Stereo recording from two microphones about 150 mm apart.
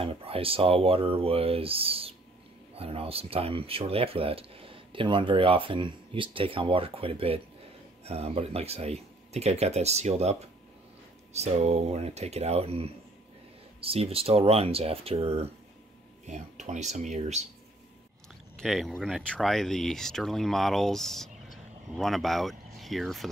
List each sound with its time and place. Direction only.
0.0 s speech: 40° right (ahead or behind)
11.3 s speech: 45° right (ahead or behind)
18.6 s speech: centre (ahead or behind)